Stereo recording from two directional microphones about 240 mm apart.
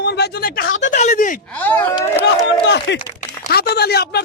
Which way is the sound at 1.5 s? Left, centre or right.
Centre.